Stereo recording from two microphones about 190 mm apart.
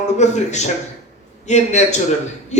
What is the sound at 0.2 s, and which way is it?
A man's voice, 40° left (ahead or behind).